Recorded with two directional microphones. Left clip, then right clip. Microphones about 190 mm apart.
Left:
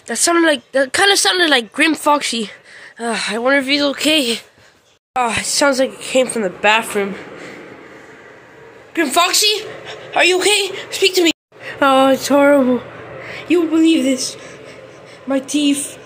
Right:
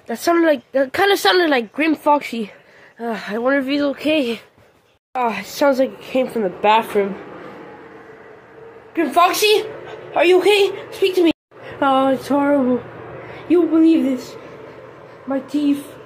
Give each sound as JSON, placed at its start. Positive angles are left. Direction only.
{"t": 0.1, "sound": "a woman's voice", "side_deg": 0}
{"t": 3.9, "sound": "a woman's voice", "side_deg": 10}
{"t": 8.9, "sound": "a woman's voice", "side_deg": 5}
{"t": 15.2, "sound": "a woman's voice", "side_deg": 5}